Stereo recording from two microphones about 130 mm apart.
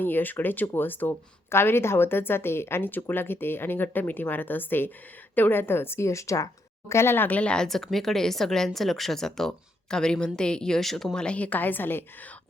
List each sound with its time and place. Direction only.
0.0 s a woman's voice: 15° left (ahead or behind)